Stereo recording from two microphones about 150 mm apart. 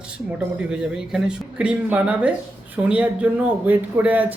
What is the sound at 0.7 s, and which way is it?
Speech, 5° right (ahead or behind).